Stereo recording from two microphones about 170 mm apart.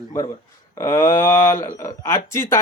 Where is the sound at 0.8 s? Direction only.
15° left (ahead or behind).